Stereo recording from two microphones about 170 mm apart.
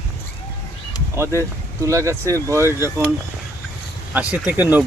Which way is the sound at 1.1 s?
15° right (ahead or behind).